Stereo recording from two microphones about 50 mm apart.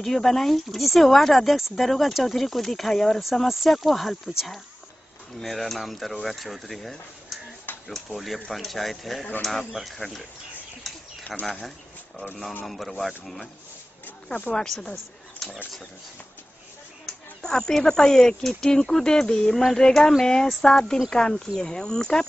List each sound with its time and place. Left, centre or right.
0.0 s speech: centre
5.4 s speech: centre
11.3 s speech: centre
12.6 s speech: centre
14.0 s a sound: left
14.7 s speech: centre
17.0 s speech: centre